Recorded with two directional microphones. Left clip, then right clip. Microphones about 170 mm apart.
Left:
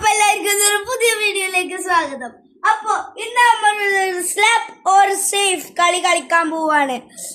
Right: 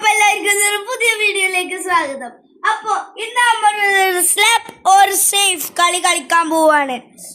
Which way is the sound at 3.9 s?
55° right (ahead or behind).